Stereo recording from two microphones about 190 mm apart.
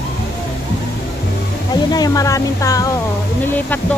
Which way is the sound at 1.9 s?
20° left (ahead or behind).